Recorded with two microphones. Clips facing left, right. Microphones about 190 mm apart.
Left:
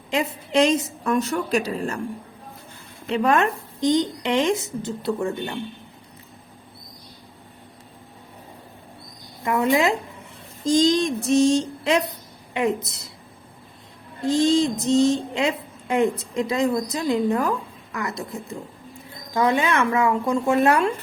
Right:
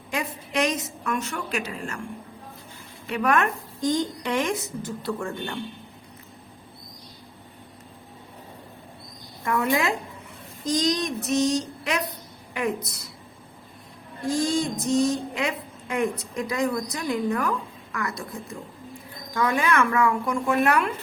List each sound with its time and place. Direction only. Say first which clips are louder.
0.1 s a woman's voice: left 6 dB; 25° left (ahead or behind)
3.1 s speech: left 3 dB; 25° left (ahead or behind)
9.4 s speech: left 4 dB; 20° left (ahead or behind)
14.2 s speech: left 6 dB; 25° left (ahead or behind)